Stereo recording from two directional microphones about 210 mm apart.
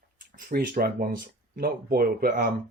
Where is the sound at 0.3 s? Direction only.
45° right (ahead or behind).